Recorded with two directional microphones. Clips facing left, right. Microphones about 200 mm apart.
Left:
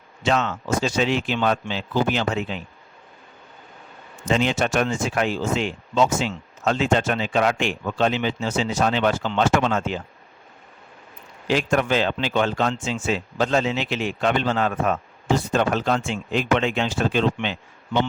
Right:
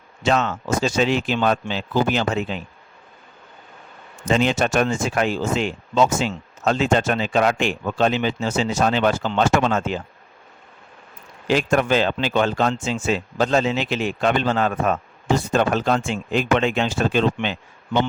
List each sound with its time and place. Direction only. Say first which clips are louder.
0.2 s a man's voice: right 2 dB; 45° right (ahead or behind)
4.3 s a man's voice: right 2 dB; 45° right (ahead or behind)
11.4 s a man's voice: right 2 dB; 45° right (ahead or behind)